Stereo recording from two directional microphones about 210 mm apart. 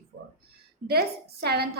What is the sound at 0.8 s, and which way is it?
Speech, 50° right (ahead or behind).